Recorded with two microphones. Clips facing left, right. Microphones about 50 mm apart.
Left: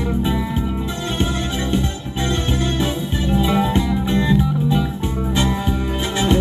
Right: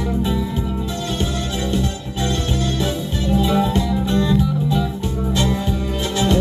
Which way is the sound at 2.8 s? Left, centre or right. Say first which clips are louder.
Left 1 dB; left.